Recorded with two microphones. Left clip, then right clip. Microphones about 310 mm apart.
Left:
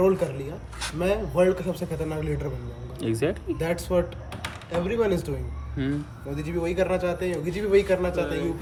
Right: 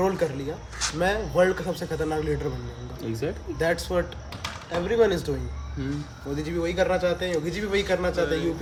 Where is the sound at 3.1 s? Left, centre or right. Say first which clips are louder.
Left 4 dB; left.